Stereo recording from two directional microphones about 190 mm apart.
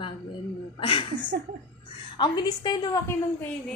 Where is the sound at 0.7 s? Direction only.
25° left (ahead or behind).